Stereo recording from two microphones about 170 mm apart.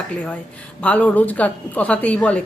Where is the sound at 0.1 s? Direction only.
5° left (ahead or behind).